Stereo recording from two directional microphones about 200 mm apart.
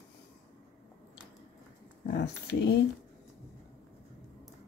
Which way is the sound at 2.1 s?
60° left (ahead or behind).